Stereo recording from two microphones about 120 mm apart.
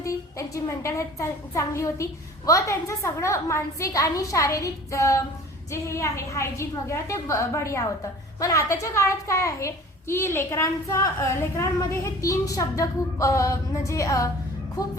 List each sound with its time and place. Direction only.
0.0 s a woman's voice: 25° left (ahead or behind)